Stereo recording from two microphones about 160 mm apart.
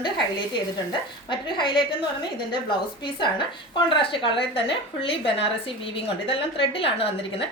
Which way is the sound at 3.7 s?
30° left (ahead or behind).